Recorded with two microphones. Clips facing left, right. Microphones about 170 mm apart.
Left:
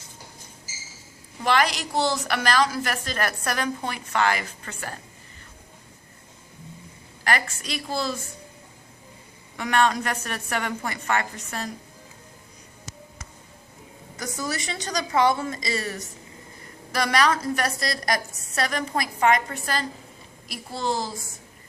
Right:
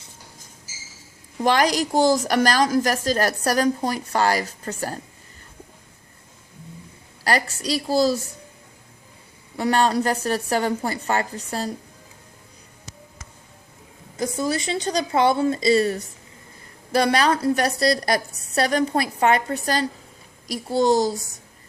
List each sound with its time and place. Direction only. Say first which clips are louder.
1.4 s a woman's voice: right 4 dB; 40° right (ahead or behind)
7.3 s a woman's voice: right 4 dB; 35° right (ahead or behind)
9.6 s a woman's voice: right 3 dB; 35° right (ahead or behind)
14.2 s a woman's voice: right 7 dB; 25° right (ahead or behind)